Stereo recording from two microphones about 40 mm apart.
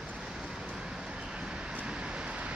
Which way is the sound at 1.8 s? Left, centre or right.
Right.